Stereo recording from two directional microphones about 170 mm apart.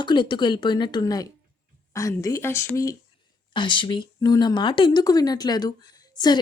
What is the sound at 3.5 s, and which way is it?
Speech, 30° left (ahead or behind).